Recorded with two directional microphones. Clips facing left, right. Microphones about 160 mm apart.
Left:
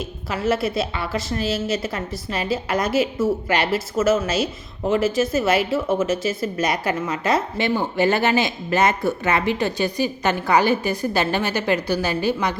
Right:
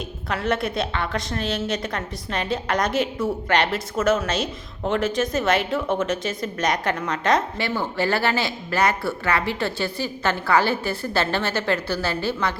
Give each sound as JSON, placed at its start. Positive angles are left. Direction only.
{"t": 0.3, "sound": "a woman's voice", "side_deg": 5}